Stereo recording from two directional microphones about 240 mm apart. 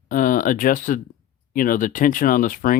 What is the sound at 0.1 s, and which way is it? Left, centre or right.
Speech, left.